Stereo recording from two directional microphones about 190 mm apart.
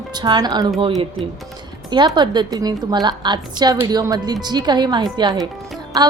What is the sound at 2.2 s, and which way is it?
A woman's voice, 20° right (ahead or behind).